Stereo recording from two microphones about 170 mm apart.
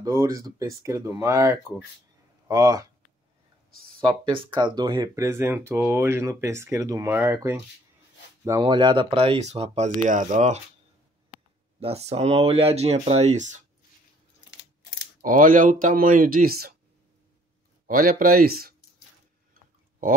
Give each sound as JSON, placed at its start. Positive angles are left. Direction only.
{"t": 0.0, "sound": "speech", "side_deg": -20}
{"t": 4.0, "sound": "speech", "side_deg": -30}
{"t": 8.5, "sound": "speech", "side_deg": -25}
{"t": 11.8, "sound": "speech", "side_deg": -40}
{"t": 15.2, "sound": "speech", "side_deg": -50}
{"t": 17.8, "sound": "speech", "side_deg": -55}